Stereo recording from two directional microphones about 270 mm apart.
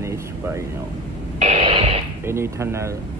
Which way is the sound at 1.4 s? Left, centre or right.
Right.